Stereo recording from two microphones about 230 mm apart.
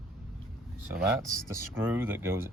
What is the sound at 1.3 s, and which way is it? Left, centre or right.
Speech, centre.